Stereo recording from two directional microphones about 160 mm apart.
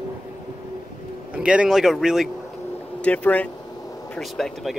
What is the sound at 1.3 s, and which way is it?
Speech, 5° right (ahead or behind).